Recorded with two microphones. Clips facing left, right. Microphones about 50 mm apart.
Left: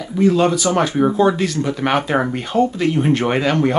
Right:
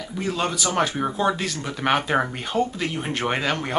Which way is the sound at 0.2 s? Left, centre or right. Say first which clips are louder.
Left 10 dB; centre.